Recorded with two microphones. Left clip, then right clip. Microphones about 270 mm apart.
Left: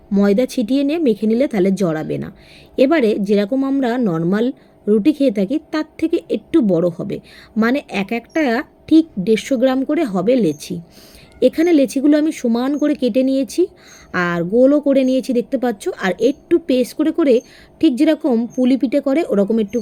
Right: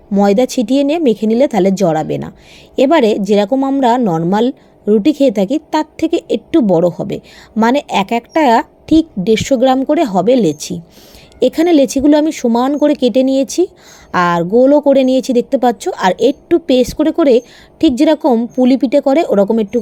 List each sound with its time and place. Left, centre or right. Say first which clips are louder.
0.1 s a woman's voice: right 5 dB; centre